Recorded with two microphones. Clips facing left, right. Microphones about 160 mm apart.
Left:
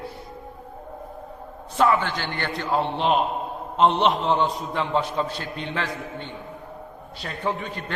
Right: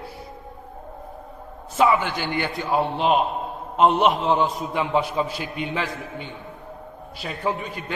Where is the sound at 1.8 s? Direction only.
10° right (ahead or behind).